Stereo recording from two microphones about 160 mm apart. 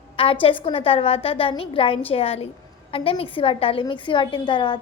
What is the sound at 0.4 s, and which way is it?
A woman's voice, 35° left (ahead or behind).